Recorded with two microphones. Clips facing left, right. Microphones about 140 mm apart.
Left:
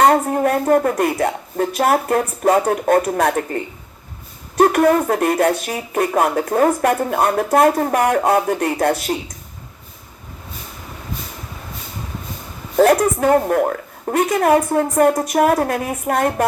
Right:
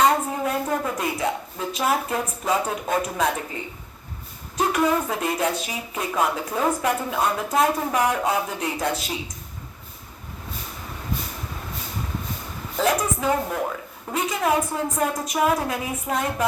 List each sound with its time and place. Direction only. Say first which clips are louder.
0.0 s a woman's voice: left 6 dB; 60° left (ahead or behind)
12.7 s speech: left 9 dB; 60° left (ahead or behind)